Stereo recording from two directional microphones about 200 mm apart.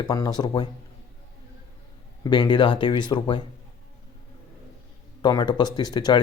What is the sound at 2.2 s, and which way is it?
Speech, 20° left (ahead or behind).